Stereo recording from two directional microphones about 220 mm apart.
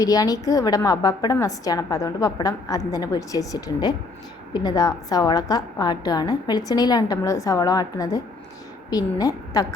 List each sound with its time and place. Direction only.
0.0 s a woman's voice: 15° left (ahead or behind)